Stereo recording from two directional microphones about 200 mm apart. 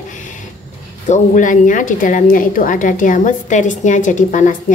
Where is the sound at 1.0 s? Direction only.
40° left (ahead or behind).